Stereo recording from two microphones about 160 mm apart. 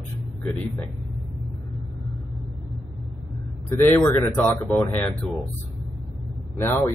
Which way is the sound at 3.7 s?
15° left (ahead or behind).